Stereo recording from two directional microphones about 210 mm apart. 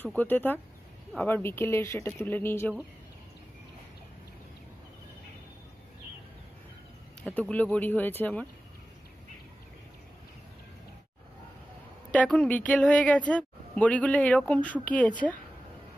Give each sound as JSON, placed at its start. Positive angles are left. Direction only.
{"t": 0.0, "sound": "speech", "side_deg": 10}
{"t": 7.2, "sound": "speech", "side_deg": 5}
{"t": 12.1, "sound": "speech", "side_deg": 5}